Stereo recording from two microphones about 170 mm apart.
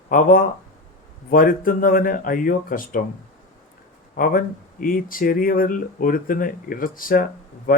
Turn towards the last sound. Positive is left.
turn(degrees=55)  # may be behind; listen again after turning